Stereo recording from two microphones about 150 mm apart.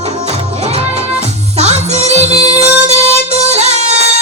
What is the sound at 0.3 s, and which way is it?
Music, 45° right (ahead or behind).